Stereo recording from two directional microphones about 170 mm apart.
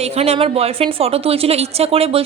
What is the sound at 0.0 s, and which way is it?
A woman's voice, 40° right (ahead or behind).